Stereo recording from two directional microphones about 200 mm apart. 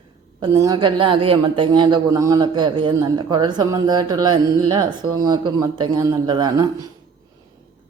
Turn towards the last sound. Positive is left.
turn(degrees=-20)  # may be behind; listen again after turning